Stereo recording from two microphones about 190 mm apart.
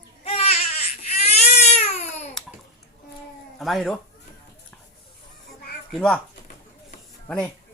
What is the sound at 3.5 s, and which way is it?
Speech, centre (ahead or behind).